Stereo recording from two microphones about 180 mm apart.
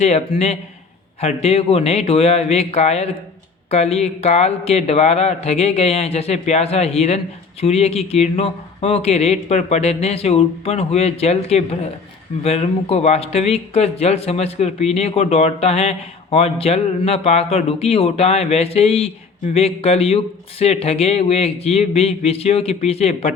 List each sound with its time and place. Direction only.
0.0 s speech: 40° left (ahead or behind)